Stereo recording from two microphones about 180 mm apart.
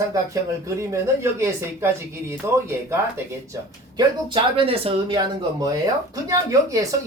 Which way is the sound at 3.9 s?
25° right (ahead or behind).